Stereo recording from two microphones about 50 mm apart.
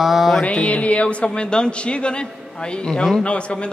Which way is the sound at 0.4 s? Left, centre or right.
Left.